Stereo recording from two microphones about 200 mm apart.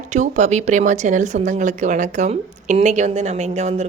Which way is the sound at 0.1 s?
35° right (ahead or behind).